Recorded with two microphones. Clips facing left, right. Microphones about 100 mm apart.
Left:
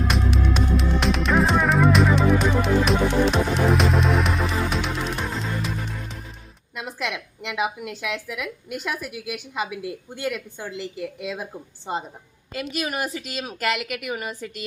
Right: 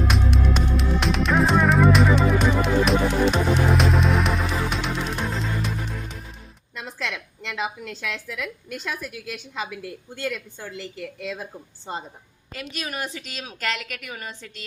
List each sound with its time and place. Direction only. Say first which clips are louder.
0.0 s music: even; centre (ahead or behind)
6.7 s a woman's voice: left 2 dB; 15° left (ahead or behind)
12.5 s a woman's voice: left 5 dB; 5° left (ahead or behind)